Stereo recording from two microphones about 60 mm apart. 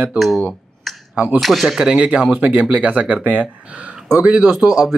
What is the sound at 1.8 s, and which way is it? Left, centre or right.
Speech, centre.